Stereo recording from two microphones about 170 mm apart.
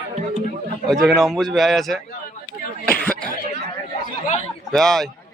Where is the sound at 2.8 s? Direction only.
5° left (ahead or behind).